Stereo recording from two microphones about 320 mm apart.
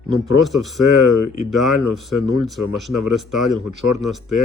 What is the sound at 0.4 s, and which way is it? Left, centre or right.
Speech, centre.